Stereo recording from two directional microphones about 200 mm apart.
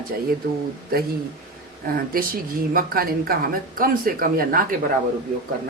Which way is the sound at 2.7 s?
45° right (ahead or behind).